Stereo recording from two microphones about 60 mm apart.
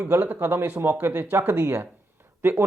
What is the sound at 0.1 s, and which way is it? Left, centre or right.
Speech, right.